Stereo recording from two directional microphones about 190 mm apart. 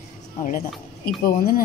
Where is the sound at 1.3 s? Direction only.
50° left (ahead or behind).